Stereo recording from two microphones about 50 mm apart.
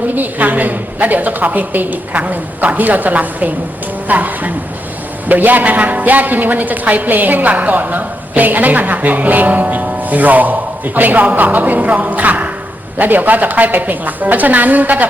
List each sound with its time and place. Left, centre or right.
0.2 s a woman's voice: right